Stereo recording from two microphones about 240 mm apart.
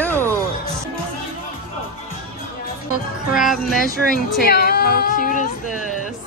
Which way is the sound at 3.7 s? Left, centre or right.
Left.